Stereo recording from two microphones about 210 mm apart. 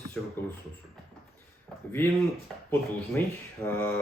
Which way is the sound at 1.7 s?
5° left (ahead or behind).